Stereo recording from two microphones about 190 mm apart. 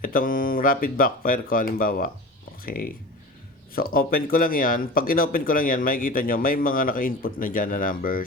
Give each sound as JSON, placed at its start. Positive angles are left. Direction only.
{"t": 0.0, "sound": "speech", "side_deg": 45}